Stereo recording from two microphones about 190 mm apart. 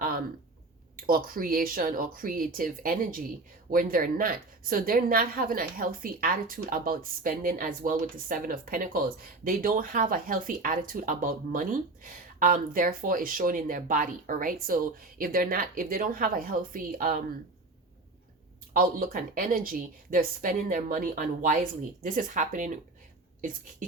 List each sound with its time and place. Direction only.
1.0 s a woman's voice: 45° right (ahead or behind)
18.7 s a woman's voice: 45° right (ahead or behind)